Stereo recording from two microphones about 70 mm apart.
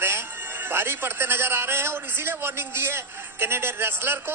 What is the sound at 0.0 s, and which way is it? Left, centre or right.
A man's voice, right.